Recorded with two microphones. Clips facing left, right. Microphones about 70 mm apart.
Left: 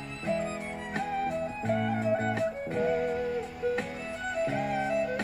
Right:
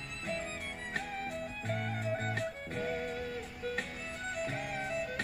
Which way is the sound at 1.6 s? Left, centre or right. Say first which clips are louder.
Left 9 dB; left.